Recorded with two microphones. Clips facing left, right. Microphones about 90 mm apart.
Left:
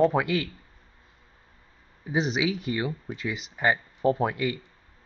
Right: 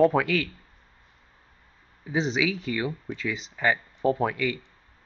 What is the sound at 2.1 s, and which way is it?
Speech, 10° left (ahead or behind).